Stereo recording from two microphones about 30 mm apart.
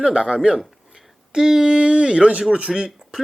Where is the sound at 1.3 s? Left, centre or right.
Centre.